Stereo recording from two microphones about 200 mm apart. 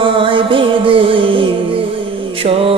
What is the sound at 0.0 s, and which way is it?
Music, 25° right (ahead or behind).